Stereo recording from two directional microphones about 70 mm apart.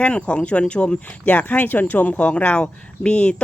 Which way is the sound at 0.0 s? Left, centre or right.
Centre.